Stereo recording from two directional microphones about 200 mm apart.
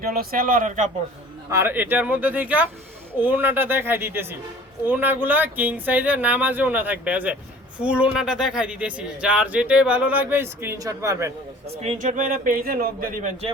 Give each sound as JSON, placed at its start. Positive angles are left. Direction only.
{"t": 0.0, "sound": "speech", "side_deg": -50}
{"t": 1.5, "sound": "speech", "side_deg": -15}
{"t": 11.7, "sound": "a man's voice", "side_deg": -30}